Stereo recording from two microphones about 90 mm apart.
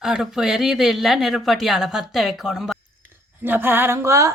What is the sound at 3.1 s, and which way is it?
Speech, 20° right (ahead or behind).